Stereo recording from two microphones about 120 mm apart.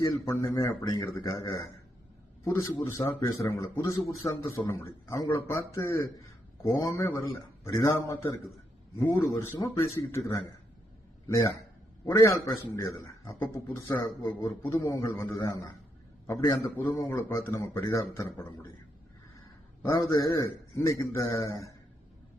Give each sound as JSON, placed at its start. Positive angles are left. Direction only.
{"t": 0.0, "sound": "speech", "side_deg": 25}
{"t": 12.0, "sound": "speech", "side_deg": 25}
{"t": 16.4, "sound": "a man's voice", "side_deg": 35}
{"t": 17.2, "sound": "speech", "side_deg": 20}
{"t": 19.8, "sound": "speech", "side_deg": 25}